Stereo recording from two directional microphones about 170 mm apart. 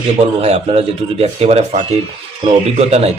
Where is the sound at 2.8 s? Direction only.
40° right (ahead or behind).